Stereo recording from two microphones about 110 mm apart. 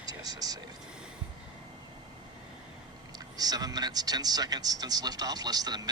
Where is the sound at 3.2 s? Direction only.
35° right (ahead or behind).